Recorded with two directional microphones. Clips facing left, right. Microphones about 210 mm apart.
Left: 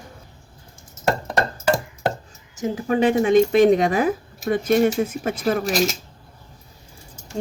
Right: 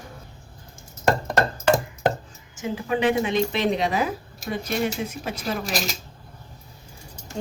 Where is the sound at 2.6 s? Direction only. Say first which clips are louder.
Left 4 dB; 40° left (ahead or behind).